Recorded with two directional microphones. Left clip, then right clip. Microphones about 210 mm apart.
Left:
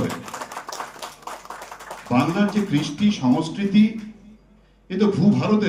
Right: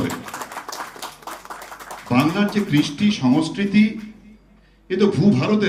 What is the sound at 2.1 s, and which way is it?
Speech, 5° right (ahead or behind).